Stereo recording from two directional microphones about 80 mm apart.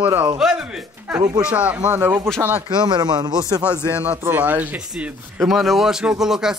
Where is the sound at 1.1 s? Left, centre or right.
Centre.